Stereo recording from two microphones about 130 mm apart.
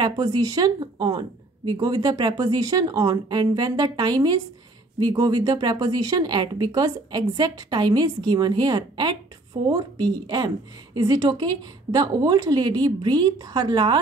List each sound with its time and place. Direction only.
0.0 s speech: 30° right (ahead or behind)